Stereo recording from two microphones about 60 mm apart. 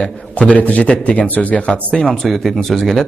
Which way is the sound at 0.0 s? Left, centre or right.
Centre.